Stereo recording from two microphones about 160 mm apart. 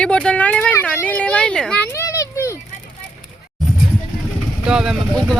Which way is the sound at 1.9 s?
20° left (ahead or behind).